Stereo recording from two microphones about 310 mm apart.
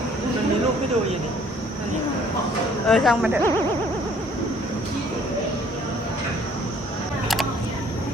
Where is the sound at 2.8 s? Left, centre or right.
Centre.